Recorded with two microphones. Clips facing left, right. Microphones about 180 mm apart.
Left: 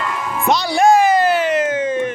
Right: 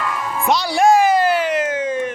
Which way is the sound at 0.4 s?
5° right (ahead or behind).